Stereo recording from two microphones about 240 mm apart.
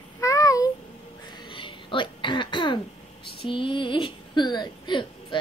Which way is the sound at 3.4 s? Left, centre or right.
Left.